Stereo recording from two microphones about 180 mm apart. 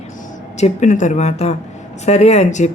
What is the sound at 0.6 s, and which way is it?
Speech, 40° left (ahead or behind).